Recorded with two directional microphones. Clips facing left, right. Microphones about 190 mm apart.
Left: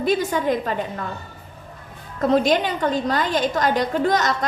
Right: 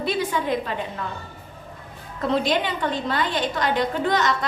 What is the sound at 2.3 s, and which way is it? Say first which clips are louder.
A woman's voice: left 4 dB; 45° left (ahead or behind).